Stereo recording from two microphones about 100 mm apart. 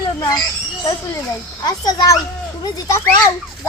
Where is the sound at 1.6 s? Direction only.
40° left (ahead or behind).